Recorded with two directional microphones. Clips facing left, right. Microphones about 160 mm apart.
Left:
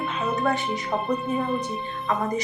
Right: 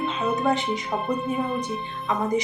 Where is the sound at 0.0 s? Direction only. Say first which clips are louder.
Right 1 dB; 20° right (ahead or behind).